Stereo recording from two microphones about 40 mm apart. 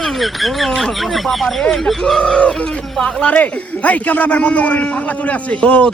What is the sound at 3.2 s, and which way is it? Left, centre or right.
Speech, left.